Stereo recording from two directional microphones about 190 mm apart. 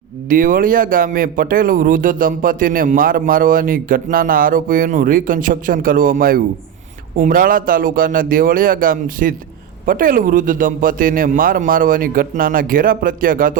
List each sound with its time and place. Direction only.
0.3 s a man's voice: 45° right (ahead or behind)